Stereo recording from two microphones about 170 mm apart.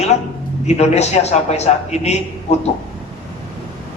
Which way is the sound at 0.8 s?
40° left (ahead or behind).